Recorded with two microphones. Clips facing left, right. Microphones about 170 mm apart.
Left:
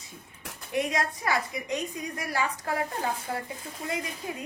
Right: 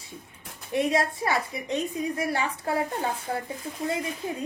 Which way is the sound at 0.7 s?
30° right (ahead or behind).